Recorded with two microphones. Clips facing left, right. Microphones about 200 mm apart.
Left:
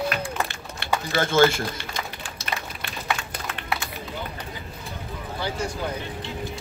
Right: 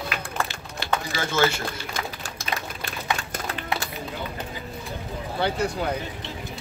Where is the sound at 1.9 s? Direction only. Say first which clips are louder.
Right 1 dB; 45° right (ahead or behind).